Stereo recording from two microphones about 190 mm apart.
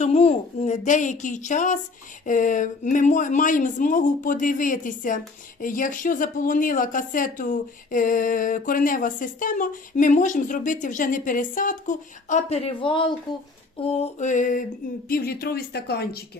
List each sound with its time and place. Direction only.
0.0 s speech: 35° left (ahead or behind)
13.8 s speech: 35° left (ahead or behind); by 16.2 s 60° left (ahead or behind)